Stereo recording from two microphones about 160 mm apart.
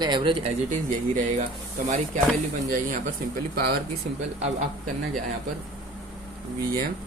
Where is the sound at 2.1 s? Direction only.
50° right (ahead or behind).